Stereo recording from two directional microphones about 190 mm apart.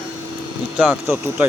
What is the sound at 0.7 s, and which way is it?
Speech, 5° right (ahead or behind).